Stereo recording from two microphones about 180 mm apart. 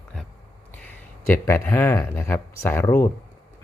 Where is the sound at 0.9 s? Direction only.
15° left (ahead or behind).